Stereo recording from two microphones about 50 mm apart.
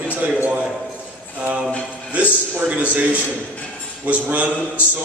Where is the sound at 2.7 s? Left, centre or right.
Right.